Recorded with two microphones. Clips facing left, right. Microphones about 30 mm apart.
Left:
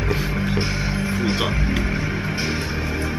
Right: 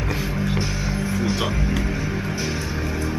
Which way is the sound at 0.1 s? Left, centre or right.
Centre.